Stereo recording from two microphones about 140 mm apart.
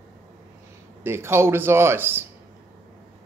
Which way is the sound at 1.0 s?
15° right (ahead or behind).